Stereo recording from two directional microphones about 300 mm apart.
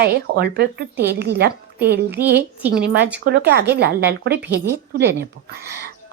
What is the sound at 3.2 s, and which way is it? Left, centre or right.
A woman's voice, right.